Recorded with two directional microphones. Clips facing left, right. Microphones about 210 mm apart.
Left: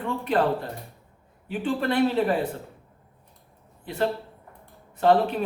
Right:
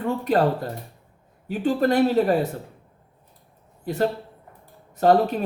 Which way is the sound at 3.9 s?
40° right (ahead or behind).